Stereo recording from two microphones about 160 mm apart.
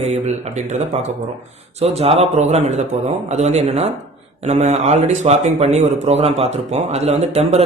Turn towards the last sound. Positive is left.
turn(degrees=-40)  # may be behind; listen again after turning